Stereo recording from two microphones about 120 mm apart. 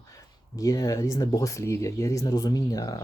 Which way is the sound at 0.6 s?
30° left (ahead or behind).